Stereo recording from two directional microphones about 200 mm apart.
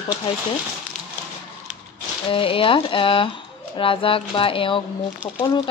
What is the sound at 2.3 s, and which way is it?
Speech, 25° left (ahead or behind).